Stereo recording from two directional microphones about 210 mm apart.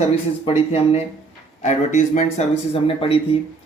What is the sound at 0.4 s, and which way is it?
Speech, 30° left (ahead or behind).